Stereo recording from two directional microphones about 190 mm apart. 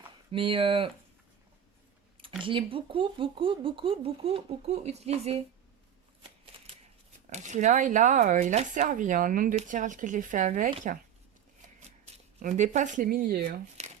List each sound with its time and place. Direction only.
0.3 s speech: 30° right (ahead or behind)
2.4 s speech: 25° right (ahead or behind)
6.5 s shuffling cards: 30° right (ahead or behind)
7.3 s speech: 40° right (ahead or behind)
12.4 s speech: 40° right (ahead or behind)